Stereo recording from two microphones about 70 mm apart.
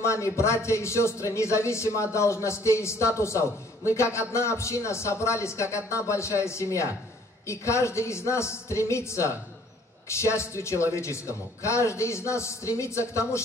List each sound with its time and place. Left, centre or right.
0.0 s a man's voice: left